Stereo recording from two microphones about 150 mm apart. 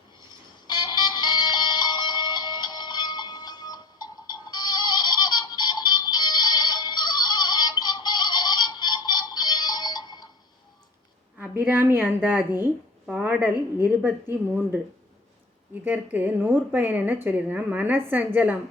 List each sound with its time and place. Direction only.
0.7 s music: 30° left (ahead or behind)
11.3 s a woman's voice: 10° right (ahead or behind)